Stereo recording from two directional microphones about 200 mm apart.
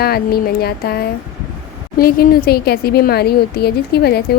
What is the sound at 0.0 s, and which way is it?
A woman's voice, 50° left (ahead or behind).